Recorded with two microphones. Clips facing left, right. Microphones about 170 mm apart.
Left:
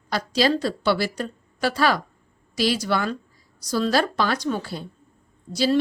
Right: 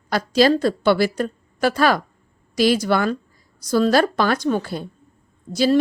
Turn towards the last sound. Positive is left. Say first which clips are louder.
# right 4 dB
turn(degrees=-50)  # may be behind; listen again after turning